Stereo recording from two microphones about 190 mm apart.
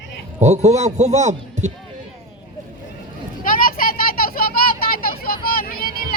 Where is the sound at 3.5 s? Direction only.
45° left (ahead or behind).